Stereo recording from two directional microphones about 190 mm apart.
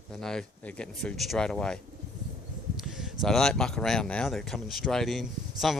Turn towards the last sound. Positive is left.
turn(degrees=0)  # may be behind; listen again after turning